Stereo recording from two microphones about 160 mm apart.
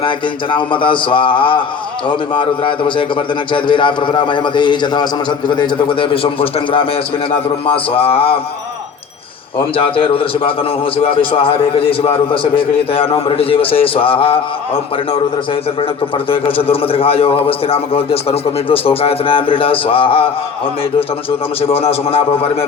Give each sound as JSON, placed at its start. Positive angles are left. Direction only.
{"t": 0.5, "sound": "a man's voice", "side_deg": 30}
{"t": 9.6, "sound": "a man's voice", "side_deg": 35}
{"t": 16.3, "sound": "a man's voice", "side_deg": 35}
{"t": 21.7, "sound": "a man's voice", "side_deg": 40}